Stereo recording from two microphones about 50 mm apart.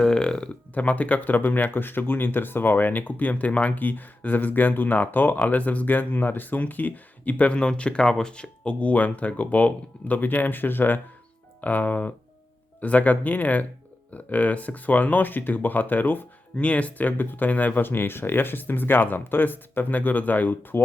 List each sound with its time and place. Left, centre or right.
0.0 s a sound: centre
0.7 s speech: left
16.6 s speech: left